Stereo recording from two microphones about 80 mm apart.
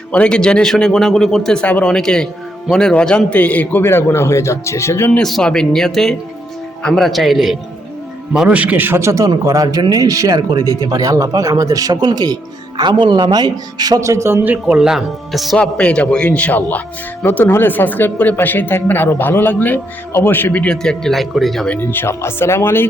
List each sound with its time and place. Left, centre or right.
0.1 s speech: centre; by 5.1 s left
5.2 s speech: centre
8.3 s speech: centre; by 14.0 s right
14.0 s speech: right
14.4 s speech: centre
14.8 s speech: centre
15.5 s speech: centre
21.8 s speech: left